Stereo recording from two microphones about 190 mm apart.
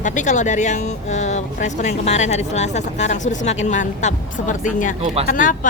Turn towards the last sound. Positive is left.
turn(degrees=45)  # may be behind; listen again after turning